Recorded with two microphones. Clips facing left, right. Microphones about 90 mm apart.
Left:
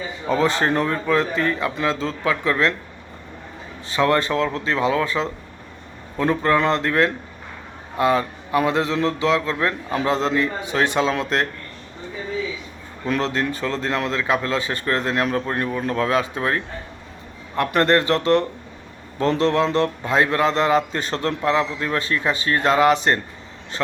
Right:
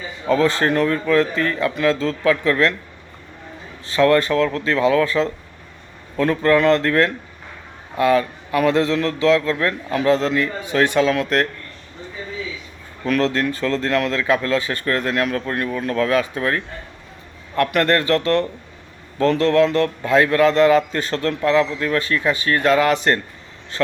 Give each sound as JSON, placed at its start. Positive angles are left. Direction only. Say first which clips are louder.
{"t": 0.3, "sound": "a man's voice", "louder": "right 2 dB", "side_deg": 20}
{"t": 3.8, "sound": "a man's voice", "louder": "right 4 dB", "side_deg": 20}
{"t": 13.1, "sound": "a man's voice", "louder": "right 3 dB", "side_deg": 20}
{"t": 17.7, "sound": "a man's voice", "louder": "left 1 dB", "side_deg": 25}